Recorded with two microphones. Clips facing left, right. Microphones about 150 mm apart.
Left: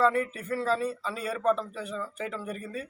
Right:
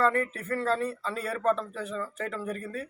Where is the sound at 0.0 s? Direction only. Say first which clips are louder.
Left 1 dB; 5° left (ahead or behind).